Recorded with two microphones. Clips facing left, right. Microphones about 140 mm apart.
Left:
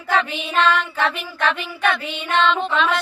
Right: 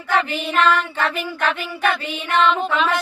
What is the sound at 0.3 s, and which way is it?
Child singing, 5° right (ahead or behind).